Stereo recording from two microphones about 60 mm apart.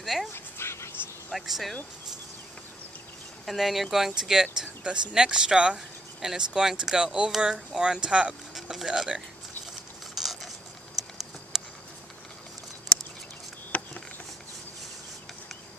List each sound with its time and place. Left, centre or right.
0.0 s dog: centre
0.3 s dog: left
1.3 s speech: centre
3.4 s speech: centre
8.5 s speech: centre
10.1 s a sound: centre
13.7 s a sound: left